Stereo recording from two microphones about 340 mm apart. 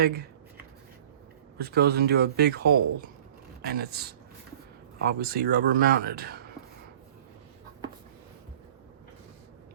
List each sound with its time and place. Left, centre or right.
0.0 s speech: right
1.5 s speech: right